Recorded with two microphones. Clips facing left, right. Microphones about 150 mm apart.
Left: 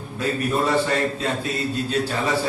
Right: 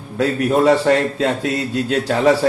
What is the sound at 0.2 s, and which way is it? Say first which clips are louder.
A man's voice: right 7 dB; 80° right.